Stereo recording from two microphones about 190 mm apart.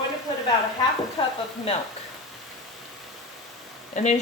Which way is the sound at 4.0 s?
40° left (ahead or behind).